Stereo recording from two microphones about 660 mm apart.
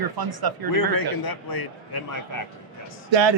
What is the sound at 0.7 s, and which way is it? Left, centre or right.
A man's voice, left.